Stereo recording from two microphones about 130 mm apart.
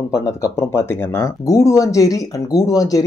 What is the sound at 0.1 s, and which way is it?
Speech, 25° left (ahead or behind).